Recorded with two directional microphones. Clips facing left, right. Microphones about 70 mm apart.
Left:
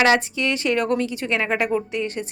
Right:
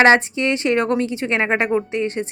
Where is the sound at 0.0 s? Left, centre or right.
Right.